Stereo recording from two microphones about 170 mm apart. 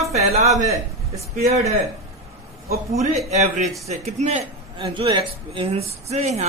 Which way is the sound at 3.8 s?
40° right (ahead or behind).